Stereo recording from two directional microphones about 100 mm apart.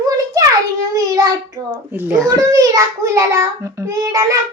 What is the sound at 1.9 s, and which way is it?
Speech, 20° right (ahead or behind).